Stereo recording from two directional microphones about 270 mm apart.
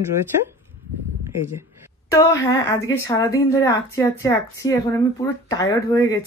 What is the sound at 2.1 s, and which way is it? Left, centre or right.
Speech, centre.